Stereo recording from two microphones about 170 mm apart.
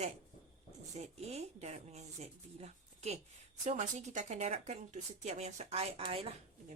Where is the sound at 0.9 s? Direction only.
40° right (ahead or behind).